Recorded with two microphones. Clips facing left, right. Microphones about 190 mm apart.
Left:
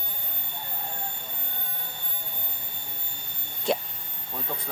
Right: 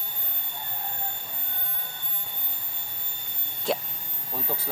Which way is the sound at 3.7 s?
Centre (ahead or behind).